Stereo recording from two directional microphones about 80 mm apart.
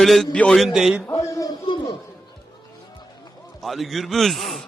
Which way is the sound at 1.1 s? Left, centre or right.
Left.